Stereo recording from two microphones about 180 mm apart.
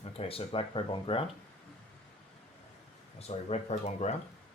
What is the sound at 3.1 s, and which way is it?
Speech, 35° left (ahead or behind).